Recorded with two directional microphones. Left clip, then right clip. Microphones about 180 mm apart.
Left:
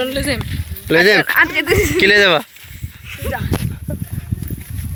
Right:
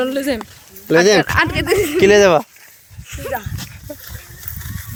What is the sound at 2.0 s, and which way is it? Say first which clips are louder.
Speech: right 1 dB; 15° right (ahead or behind).